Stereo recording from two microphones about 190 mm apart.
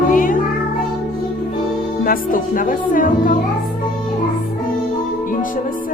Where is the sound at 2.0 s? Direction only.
50° left (ahead or behind).